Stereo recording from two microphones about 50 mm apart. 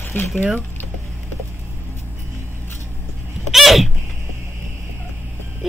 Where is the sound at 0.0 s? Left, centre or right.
Left.